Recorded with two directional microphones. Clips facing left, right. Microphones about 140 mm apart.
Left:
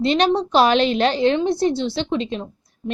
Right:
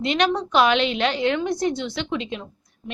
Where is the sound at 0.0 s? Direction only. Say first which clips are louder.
Left 4 dB; 30° left (ahead or behind).